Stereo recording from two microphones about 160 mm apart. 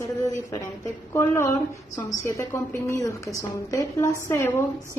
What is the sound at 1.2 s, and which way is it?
A woman's voice, 20° left (ahead or behind).